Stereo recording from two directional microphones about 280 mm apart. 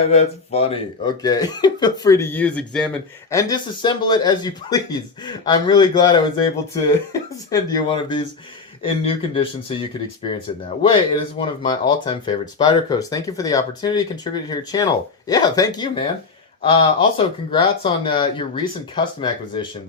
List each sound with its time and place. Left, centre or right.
0.0 s speech: left
10.8 s speech: centre